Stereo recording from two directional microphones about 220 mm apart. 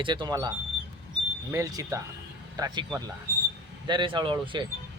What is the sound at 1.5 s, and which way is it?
Speech, 15° right (ahead or behind).